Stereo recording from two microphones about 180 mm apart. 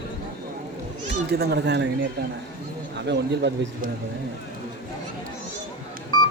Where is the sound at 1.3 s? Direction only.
65° right (ahead or behind).